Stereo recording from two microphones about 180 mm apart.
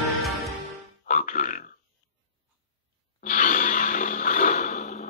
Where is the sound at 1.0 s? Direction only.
45° left (ahead or behind).